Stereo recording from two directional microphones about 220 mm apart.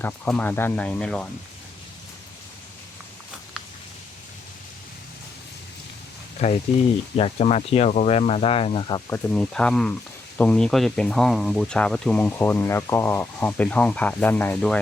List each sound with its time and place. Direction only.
0.0 s speech: 5° left (ahead or behind)
6.4 s speech: 30° left (ahead or behind); by 14.8 s 5° left (ahead or behind)